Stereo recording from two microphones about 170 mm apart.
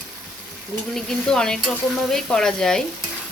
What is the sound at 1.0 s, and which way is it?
Speech, 5° left (ahead or behind).